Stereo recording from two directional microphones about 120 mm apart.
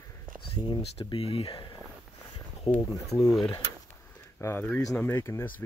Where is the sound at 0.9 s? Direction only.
55° left (ahead or behind).